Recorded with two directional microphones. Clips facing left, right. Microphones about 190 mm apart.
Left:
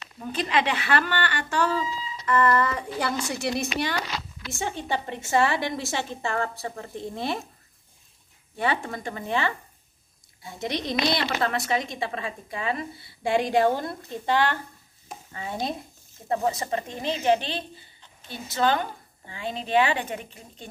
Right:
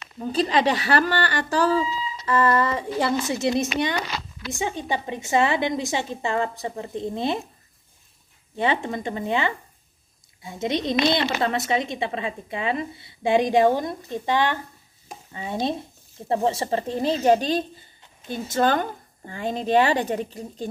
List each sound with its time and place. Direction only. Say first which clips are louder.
0.2 s a woman's voice: right 5 dB; 35° right (ahead or behind)
8.5 s a woman's voice: right 3 dB; 20° right (ahead or behind); by 20.6 s 35° right (ahead or behind)